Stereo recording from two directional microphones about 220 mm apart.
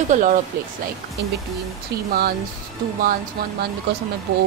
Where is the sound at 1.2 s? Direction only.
50° right (ahead or behind).